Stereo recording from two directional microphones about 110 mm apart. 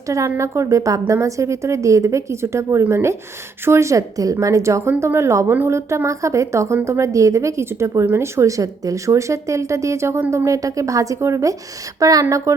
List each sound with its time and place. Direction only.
0.1 s a woman's voice: 30° right (ahead or behind)